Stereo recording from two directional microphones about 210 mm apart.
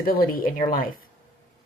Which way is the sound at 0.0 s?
45° left (ahead or behind).